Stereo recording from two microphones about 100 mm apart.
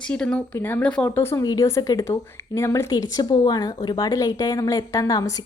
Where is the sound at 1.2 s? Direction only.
25° left (ahead or behind).